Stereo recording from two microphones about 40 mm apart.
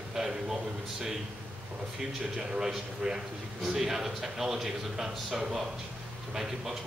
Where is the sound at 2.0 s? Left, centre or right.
Centre.